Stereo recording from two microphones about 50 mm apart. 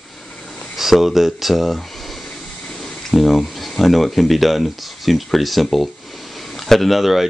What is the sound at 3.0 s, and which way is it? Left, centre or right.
Speech, centre.